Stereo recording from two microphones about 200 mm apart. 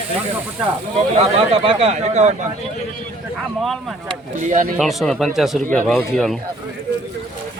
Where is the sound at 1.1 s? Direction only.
30° right (ahead or behind).